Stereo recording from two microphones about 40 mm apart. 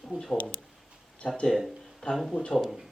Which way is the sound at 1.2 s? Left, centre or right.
Left.